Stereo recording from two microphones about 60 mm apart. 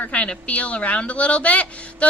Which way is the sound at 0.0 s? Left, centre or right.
Left.